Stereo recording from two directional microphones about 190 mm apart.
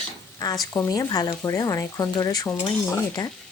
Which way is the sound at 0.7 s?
20° left (ahead or behind).